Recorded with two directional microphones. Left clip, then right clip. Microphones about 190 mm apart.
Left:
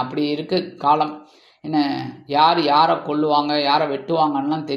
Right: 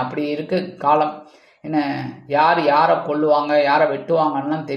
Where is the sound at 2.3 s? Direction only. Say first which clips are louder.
Even; 30° left (ahead or behind).